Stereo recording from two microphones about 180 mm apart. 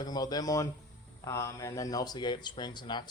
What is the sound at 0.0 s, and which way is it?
Speech, 20° left (ahead or behind).